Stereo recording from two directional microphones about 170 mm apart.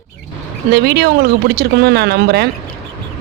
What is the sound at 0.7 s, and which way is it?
Speech, 65° right (ahead or behind).